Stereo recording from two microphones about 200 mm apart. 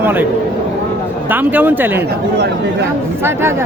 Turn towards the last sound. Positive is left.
turn(degrees=-10)  # may be behind; listen again after turning